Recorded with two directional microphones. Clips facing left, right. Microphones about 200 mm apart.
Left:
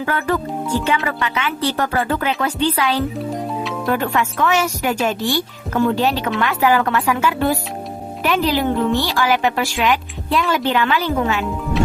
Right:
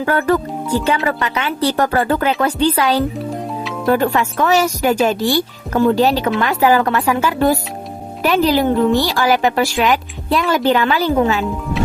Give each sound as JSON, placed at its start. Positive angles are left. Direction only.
{"t": 0.0, "sound": "a woman's voice", "side_deg": -40}
{"t": 3.2, "sound": "music", "side_deg": 0}
{"t": 3.8, "sound": "a woman's voice", "side_deg": -35}